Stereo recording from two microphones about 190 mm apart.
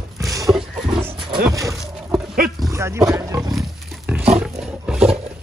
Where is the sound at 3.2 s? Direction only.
20° right (ahead or behind).